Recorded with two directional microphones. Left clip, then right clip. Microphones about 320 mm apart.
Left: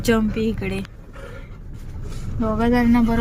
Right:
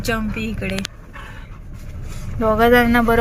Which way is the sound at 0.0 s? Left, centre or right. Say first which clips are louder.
Left 3 dB; centre.